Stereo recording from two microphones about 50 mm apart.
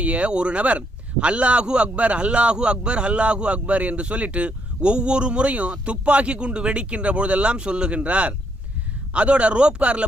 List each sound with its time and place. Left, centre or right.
0.0 s speech: right